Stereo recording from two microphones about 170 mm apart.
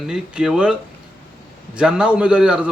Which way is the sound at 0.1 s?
5° right (ahead or behind).